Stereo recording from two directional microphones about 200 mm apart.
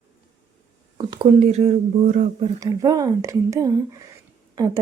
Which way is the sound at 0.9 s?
25° right (ahead or behind).